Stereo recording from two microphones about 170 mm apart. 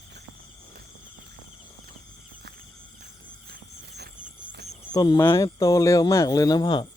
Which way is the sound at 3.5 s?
70° right (ahead or behind).